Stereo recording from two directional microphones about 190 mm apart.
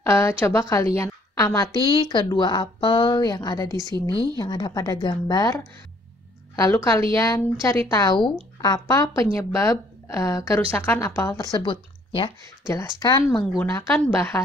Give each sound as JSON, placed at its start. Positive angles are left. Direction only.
{"t": 0.0, "sound": "speech", "side_deg": 15}